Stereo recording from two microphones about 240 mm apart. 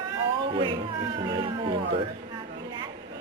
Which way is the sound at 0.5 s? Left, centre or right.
Right.